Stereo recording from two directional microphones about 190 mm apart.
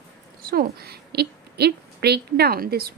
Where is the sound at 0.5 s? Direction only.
55° right (ahead or behind).